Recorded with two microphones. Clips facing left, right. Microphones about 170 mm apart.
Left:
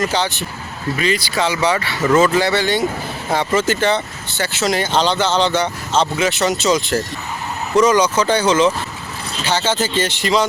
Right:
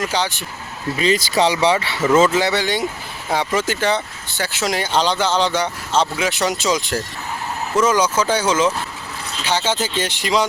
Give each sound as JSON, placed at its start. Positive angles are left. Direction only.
{"t": 0.0, "sound": "speech", "side_deg": -10}
{"t": 0.9, "sound": "speech", "side_deg": -30}
{"t": 2.1, "sound": "speech", "side_deg": -20}